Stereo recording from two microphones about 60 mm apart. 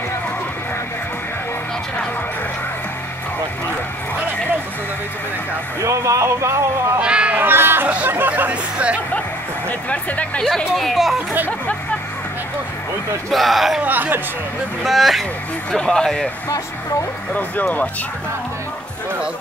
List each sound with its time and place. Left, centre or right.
5.8 s speech: right
7.0 s a sound: centre
7.3 s a sound: right
8.1 s music: right
8.5 s music: centre
9.7 s speech: left
10.7 s speech: centre
13.3 s speech: centre
13.8 s a man's voice: right
14.8 s speech: centre
17.3 s speech: left